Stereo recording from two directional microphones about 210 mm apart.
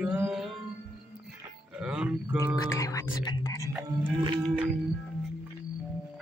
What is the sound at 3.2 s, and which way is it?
Speech, 20° left (ahead or behind).